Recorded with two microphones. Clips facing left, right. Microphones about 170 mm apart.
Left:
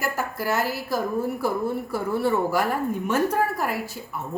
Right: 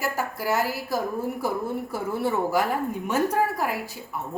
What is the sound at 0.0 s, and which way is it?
A woman's voice, 10° right (ahead or behind).